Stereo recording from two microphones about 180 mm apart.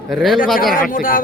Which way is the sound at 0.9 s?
50° left (ahead or behind).